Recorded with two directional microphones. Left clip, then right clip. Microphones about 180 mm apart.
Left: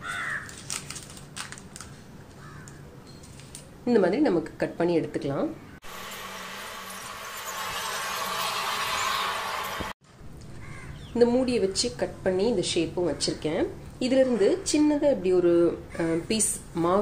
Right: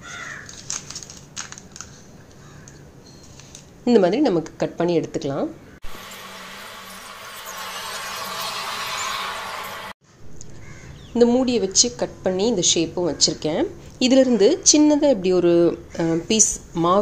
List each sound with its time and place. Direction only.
3.8 s a woman's voice: 40° right (ahead or behind); by 5.5 s 20° right (ahead or behind)
5.9 s vehicle: centre (ahead or behind)
11.1 s a woman's voice: 30° right (ahead or behind)